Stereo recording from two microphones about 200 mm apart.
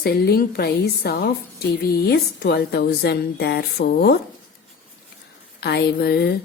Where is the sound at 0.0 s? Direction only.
50° left (ahead or behind).